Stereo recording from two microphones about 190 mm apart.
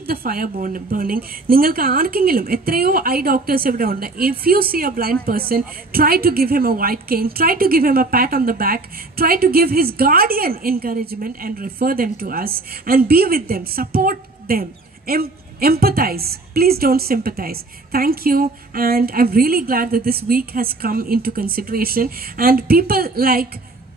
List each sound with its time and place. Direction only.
0.0 s a woman's voice: 50° right (ahead or behind)